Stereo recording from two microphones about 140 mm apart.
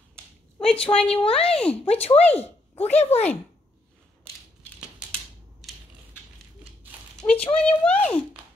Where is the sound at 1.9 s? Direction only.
45° left (ahead or behind).